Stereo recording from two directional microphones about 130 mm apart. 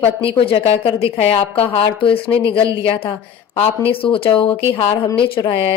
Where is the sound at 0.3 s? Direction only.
45° left (ahead or behind).